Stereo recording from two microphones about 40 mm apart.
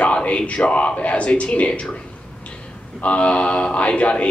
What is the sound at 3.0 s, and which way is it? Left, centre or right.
Speech, left.